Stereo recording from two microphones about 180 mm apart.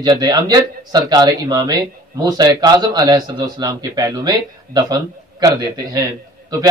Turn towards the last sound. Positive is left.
turn(degrees=-20)  # may be behind; listen again after turning